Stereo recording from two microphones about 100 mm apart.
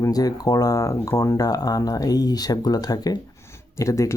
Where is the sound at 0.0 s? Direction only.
40° left (ahead or behind).